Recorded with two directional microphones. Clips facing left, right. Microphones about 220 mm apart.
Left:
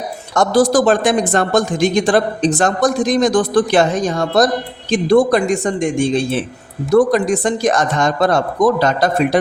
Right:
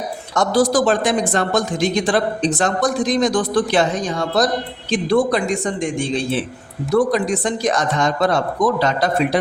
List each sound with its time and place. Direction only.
0.3 s speech: 50° left (ahead or behind)